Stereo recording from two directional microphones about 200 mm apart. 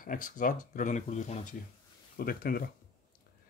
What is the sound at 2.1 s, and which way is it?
Speech, 45° left (ahead or behind).